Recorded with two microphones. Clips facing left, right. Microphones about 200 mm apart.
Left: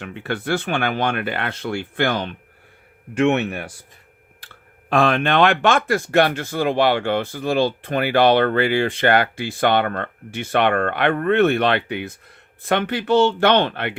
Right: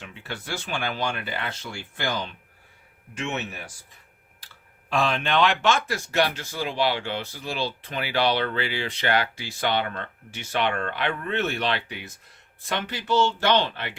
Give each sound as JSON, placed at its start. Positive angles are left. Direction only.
{"t": 0.0, "sound": "speech", "side_deg": 60}
{"t": 4.9, "sound": "speech", "side_deg": 60}